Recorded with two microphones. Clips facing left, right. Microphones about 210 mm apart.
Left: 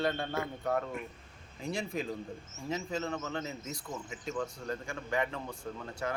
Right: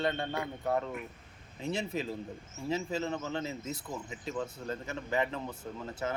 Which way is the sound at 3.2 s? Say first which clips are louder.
Right 2 dB; 30° right (ahead or behind).